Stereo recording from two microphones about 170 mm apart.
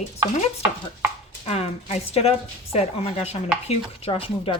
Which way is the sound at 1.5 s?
40° left (ahead or behind).